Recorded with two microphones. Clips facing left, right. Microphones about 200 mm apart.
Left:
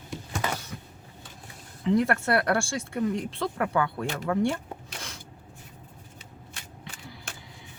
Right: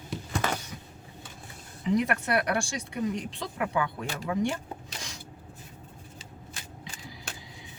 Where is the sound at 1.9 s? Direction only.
15° right (ahead or behind).